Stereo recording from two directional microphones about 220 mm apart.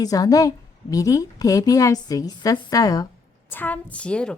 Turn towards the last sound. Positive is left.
turn(degrees=5)  # may be behind; listen again after turning